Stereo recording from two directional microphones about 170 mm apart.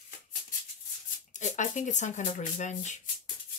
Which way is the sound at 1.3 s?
45° left (ahead or behind).